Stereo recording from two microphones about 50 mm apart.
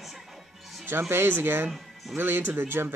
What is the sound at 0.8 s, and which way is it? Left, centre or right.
Speech, right.